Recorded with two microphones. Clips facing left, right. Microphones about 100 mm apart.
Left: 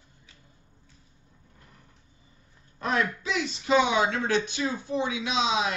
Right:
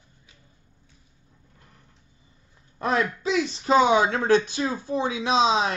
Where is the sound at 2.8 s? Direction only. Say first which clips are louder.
Right 3 dB; 30° right (ahead or behind).